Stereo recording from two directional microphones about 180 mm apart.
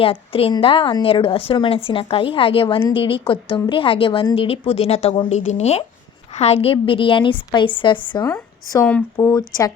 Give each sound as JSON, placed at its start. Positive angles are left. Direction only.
{"t": 0.0, "sound": "a woman's voice", "side_deg": 30}
{"t": 8.3, "sound": "speech", "side_deg": 10}